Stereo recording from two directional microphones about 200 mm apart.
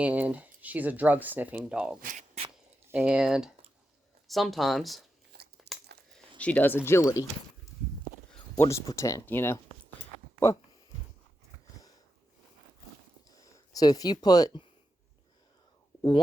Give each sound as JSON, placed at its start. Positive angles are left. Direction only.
{"t": 0.0, "sound": "speech", "side_deg": -5}
{"t": 2.0, "sound": "speech", "side_deg": -40}
{"t": 2.9, "sound": "speech", "side_deg": -5}
{"t": 5.3, "sound": "crumpling", "side_deg": -50}
{"t": 6.4, "sound": "speech", "side_deg": 10}
{"t": 8.3, "sound": "a sound", "side_deg": 10}
{"t": 8.8, "sound": "speech", "side_deg": 15}
{"t": 13.3, "sound": "speech", "side_deg": 20}